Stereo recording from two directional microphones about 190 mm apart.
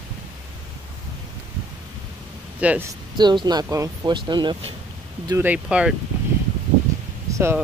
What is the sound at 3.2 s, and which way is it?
Speech, 25° right (ahead or behind).